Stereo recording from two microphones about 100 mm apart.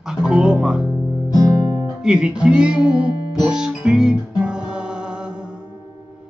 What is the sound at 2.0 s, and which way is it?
Music, 10° right (ahead or behind).